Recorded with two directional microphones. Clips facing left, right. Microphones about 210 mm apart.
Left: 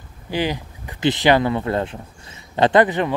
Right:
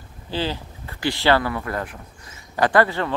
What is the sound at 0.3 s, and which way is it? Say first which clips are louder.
Speech: left 3 dB; 15° left (ahead or behind).